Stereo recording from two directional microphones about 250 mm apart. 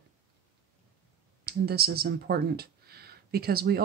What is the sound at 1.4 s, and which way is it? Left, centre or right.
Speech, right.